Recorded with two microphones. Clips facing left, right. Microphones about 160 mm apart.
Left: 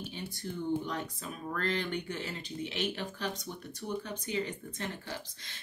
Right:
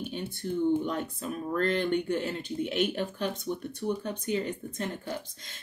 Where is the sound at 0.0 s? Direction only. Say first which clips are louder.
Right 6 dB; 55° right (ahead or behind).